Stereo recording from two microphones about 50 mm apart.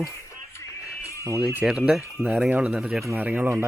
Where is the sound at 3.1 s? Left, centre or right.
Right.